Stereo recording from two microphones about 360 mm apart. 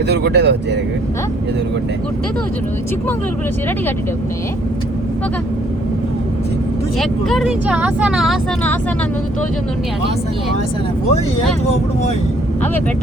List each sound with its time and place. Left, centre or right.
0.1 s speech: right
7.0 s speech: centre